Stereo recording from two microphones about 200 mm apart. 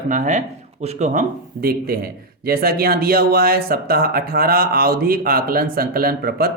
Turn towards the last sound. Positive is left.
turn(degrees=-50)  # may be behind; listen again after turning